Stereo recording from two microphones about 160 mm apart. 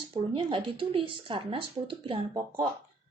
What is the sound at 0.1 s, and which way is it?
Speech, 35° right (ahead or behind).